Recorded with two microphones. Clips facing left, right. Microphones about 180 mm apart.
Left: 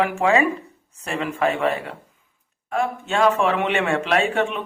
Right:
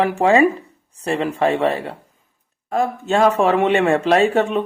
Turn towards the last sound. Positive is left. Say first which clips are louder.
# right 5 dB
turn(degrees=-40)  # may be behind; listen again after turning